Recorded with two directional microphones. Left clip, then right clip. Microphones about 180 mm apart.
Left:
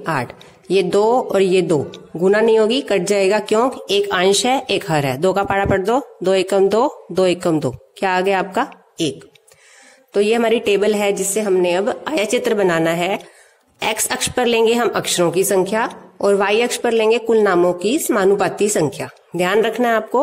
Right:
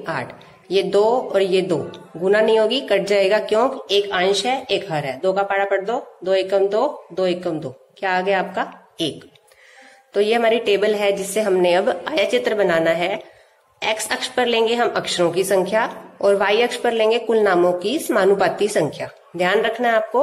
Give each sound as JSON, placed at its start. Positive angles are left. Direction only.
{"t": 0.0, "sound": "a man's voice", "side_deg": 45}
{"t": 10.1, "sound": "speech", "side_deg": 40}